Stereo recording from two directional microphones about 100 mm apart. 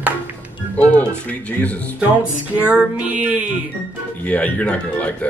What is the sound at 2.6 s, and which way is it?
Female singing, 15° right (ahead or behind).